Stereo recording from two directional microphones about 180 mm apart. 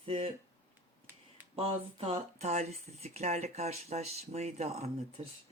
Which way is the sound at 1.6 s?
35° right (ahead or behind).